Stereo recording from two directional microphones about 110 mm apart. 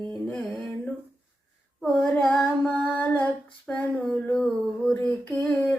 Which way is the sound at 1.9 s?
10° left (ahead or behind).